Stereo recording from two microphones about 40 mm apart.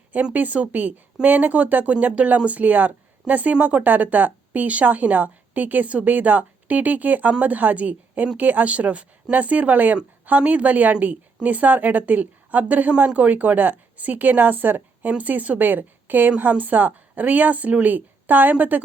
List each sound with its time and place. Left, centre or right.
0.3 s speech: right